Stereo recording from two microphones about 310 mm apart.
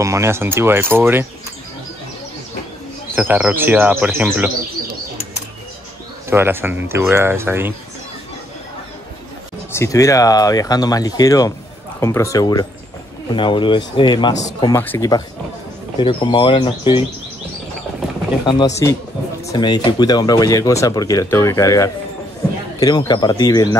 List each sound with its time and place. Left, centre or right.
0.0 s speech: centre
3.2 s speech: centre
6.3 s speech: centre
9.7 s speech: centre
14.7 s speech: centre
18.4 s speech: centre